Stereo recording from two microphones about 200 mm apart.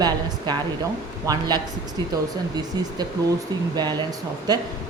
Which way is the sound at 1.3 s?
20° right (ahead or behind).